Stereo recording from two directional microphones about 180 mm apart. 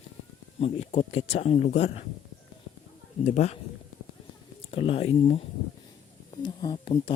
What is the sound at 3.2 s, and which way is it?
Speech, 40° left (ahead or behind).